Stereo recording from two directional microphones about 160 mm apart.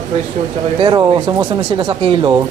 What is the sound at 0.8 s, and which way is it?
A man's voice, 30° right (ahead or behind).